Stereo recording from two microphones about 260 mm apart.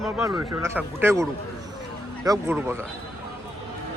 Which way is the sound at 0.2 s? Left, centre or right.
Centre.